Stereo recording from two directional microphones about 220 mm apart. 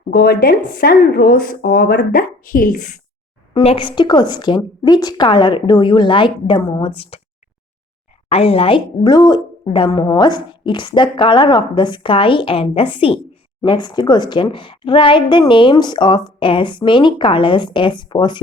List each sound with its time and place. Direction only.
0.1 s a woman's voice: 45° left (ahead or behind)
3.5 s a woman's voice: 25° left (ahead or behind)
8.3 s a woman's voice: 25° left (ahead or behind)